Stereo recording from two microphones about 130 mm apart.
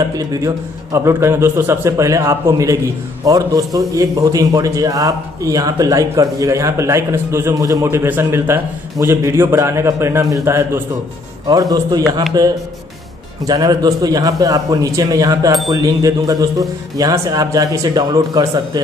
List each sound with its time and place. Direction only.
0.1 s a man's voice: 30° right (ahead or behind)
0.9 s a man's voice: 20° right (ahead or behind)